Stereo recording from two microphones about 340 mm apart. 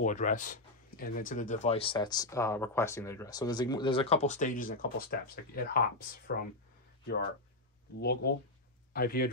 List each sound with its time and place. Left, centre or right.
0.0 s speech: left
8.0 s speech: left